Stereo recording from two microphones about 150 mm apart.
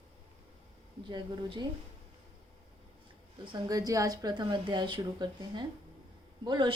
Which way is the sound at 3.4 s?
30° right (ahead or behind).